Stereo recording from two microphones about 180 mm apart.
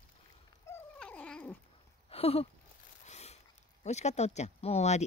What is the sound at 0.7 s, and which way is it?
Cat, 10° left (ahead or behind).